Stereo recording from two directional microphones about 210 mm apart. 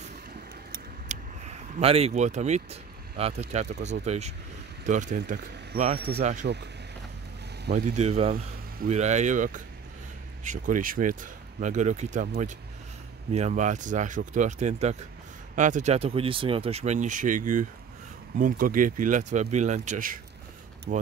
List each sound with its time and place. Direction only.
0.7 s a sound: 35° right (ahead or behind)
3.8 s speech: 35° right (ahead or behind)
6.4 s speech: 50° right (ahead or behind)
7.7 s speech: 35° right (ahead or behind)